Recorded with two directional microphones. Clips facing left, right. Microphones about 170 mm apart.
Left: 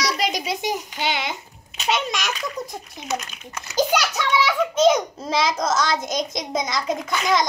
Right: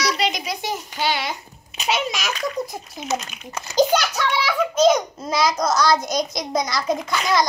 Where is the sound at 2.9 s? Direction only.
25° right (ahead or behind).